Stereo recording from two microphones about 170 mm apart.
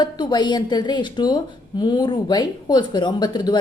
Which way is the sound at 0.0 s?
25° left (ahead or behind).